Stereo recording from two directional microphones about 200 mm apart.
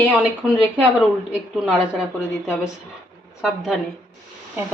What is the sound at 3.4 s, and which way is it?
Speech, centre (ahead or behind).